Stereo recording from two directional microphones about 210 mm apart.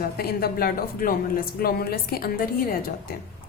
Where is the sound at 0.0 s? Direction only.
45° left (ahead or behind).